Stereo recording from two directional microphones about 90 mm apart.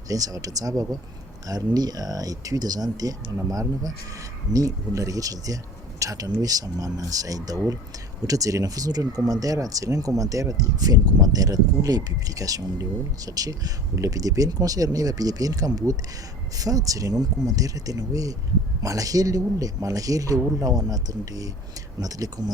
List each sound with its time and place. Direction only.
0.1 s speech: 40° right (ahead or behind)